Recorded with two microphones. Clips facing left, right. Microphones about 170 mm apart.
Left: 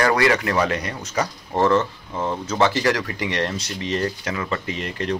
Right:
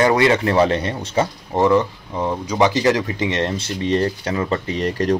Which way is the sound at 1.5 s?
15° right (ahead or behind).